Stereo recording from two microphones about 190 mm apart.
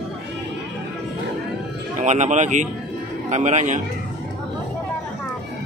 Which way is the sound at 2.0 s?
40° right (ahead or behind).